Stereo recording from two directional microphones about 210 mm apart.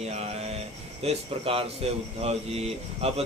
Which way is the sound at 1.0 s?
25° right (ahead or behind).